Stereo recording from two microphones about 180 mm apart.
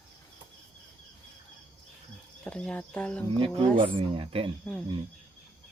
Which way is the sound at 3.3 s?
30° right (ahead or behind).